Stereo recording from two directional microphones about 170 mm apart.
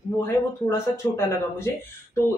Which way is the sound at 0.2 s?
15° left (ahead or behind).